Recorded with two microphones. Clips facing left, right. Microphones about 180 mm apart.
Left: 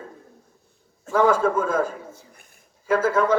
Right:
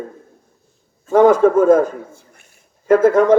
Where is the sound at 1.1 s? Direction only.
55° right (ahead or behind).